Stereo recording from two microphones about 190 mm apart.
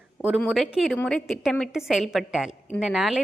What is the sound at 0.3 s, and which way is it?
A woman's voice, centre (ahead or behind).